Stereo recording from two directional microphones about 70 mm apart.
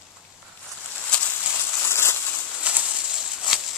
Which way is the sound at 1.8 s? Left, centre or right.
Left.